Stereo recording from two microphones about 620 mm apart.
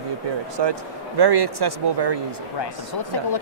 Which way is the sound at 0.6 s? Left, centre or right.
Right.